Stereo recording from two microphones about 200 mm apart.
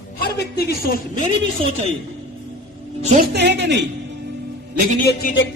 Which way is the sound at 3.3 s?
60° right (ahead or behind).